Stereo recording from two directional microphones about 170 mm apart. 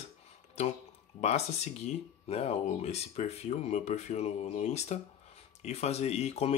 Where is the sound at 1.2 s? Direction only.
40° left (ahead or behind).